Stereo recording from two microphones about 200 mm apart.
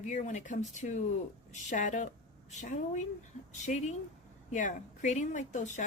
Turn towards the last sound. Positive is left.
turn(degrees=35)  # may be behind; listen again after turning